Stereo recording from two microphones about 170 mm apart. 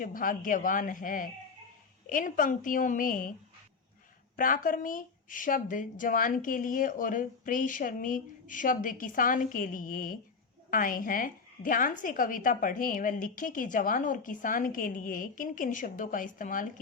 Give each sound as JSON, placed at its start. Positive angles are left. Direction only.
{"t": 0.0, "sound": "a woman's voice", "side_deg": 55}
{"t": 4.4, "sound": "a woman's voice", "side_deg": 55}